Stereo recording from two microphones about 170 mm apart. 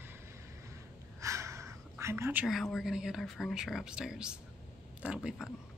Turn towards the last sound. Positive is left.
turn(degrees=0)  # may be behind; listen again after turning